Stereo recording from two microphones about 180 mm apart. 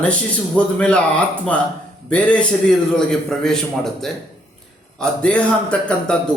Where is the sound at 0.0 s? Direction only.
5° left (ahead or behind).